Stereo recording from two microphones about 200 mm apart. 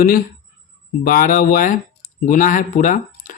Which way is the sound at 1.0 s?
45° left (ahead or behind).